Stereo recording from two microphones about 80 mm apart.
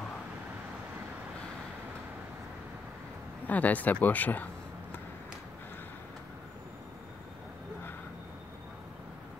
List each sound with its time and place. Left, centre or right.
3.4 s speech: centre